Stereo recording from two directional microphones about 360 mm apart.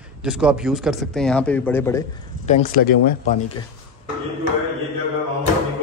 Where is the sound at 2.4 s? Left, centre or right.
Left.